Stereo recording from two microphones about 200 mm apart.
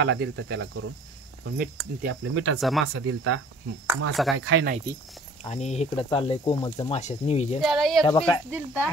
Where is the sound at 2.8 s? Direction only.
90° right.